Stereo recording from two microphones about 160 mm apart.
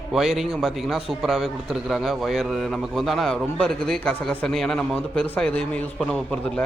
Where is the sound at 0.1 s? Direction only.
Centre (ahead or behind).